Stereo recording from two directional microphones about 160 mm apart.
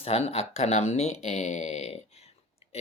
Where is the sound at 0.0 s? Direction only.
40° left (ahead or behind).